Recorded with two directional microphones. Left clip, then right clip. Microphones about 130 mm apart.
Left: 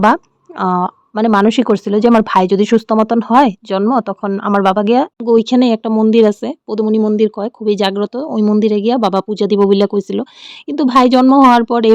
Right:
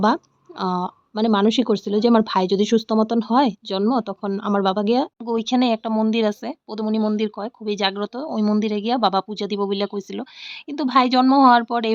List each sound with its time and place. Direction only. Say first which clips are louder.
0.6 s speech: left 9 dB; 55° left (ahead or behind)
5.2 s speech: left 10 dB; 45° left (ahead or behind)
11.2 s speech: left 6 dB; 30° left (ahead or behind)